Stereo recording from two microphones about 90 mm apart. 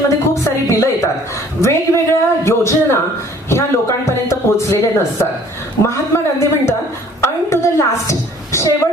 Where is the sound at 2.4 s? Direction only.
30° left (ahead or behind).